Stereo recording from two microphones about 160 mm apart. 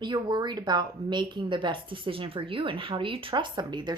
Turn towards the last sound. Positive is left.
turn(degrees=-30)  # may be behind; listen again after turning